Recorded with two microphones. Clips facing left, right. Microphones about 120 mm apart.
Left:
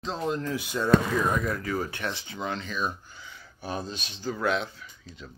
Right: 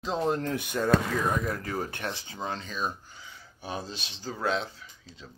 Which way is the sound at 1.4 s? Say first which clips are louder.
Left 2 dB; 40° right (ahead or behind).